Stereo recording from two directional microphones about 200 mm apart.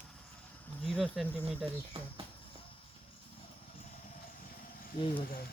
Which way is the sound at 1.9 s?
25° right (ahead or behind).